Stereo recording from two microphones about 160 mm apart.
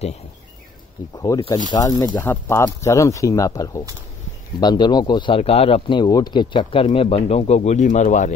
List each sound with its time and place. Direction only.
1.1 s speech: 25° left (ahead or behind)
2.1 s speech: 15° left (ahead or behind); by 8.3 s 50° left (ahead or behind)